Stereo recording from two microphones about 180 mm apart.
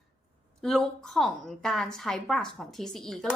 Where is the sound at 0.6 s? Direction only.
Centre (ahead or behind).